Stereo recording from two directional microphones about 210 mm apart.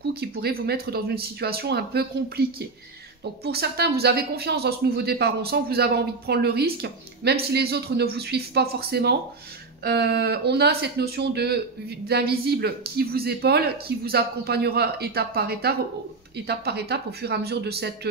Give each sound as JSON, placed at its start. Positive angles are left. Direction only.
{"t": 0.1, "sound": "speech", "side_deg": -50}
{"t": 3.4, "sound": "speech", "side_deg": -50}